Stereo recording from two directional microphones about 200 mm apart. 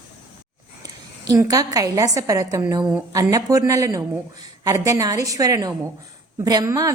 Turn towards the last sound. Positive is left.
turn(degrees=-15)  # may be behind; listen again after turning